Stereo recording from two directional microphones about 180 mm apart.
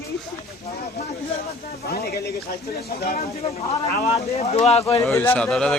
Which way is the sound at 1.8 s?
65° left (ahead or behind).